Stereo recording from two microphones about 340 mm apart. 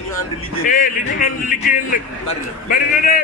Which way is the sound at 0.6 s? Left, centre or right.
Left.